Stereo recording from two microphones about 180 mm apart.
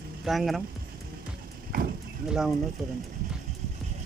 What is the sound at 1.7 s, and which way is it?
Livestock, 55° right (ahead or behind).